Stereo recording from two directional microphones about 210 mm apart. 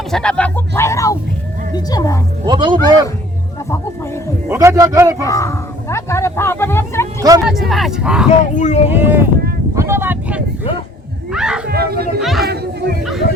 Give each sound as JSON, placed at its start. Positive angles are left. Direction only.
{"t": 0.1, "sound": "speech", "side_deg": 5}
{"t": 2.4, "sound": "speech", "side_deg": -25}
{"t": 4.4, "sound": "speech", "side_deg": -15}
{"t": 5.2, "sound": "speech", "side_deg": 15}
{"t": 7.2, "sound": "speech", "side_deg": -15}
{"t": 7.4, "sound": "speech", "side_deg": 0}
{"t": 8.5, "sound": "speech", "side_deg": 35}
{"t": 8.9, "sound": "speech", "side_deg": -10}
{"t": 9.7, "sound": "vehicle", "side_deg": -10}
{"t": 11.3, "sound": "speech", "side_deg": -5}
{"t": 11.7, "sound": "speech", "side_deg": -50}
{"t": 12.2, "sound": "speech", "side_deg": 0}